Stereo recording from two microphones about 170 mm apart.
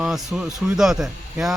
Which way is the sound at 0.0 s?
Centre (ahead or behind).